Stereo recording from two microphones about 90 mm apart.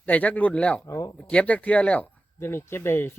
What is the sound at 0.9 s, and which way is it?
Speech, 35° left (ahead or behind).